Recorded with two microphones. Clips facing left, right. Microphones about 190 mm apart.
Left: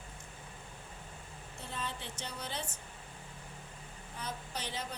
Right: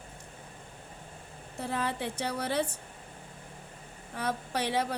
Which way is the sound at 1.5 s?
65° right (ahead or behind).